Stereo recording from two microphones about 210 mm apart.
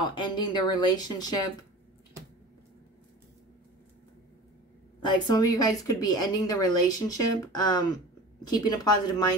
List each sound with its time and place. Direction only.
0.1 s speech: 20° left (ahead or behind)
5.0 s a woman's voice: 20° left (ahead or behind)